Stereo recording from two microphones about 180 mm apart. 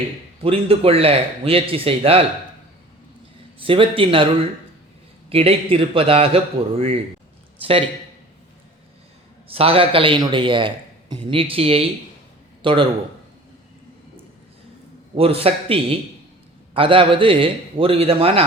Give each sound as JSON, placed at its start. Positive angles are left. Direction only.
{"t": 0.4, "sound": "a man's voice", "side_deg": -30}
{"t": 3.6, "sound": "a man's voice", "side_deg": -30}
{"t": 5.3, "sound": "a man's voice", "side_deg": -35}
{"t": 9.5, "sound": "a man's voice", "side_deg": -30}
{"t": 15.1, "sound": "a man's voice", "side_deg": -30}